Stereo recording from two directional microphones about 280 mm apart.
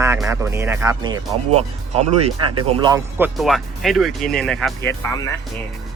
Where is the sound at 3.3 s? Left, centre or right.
Centre.